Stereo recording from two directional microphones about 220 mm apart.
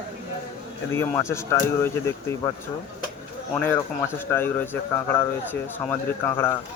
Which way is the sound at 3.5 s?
10° left (ahead or behind).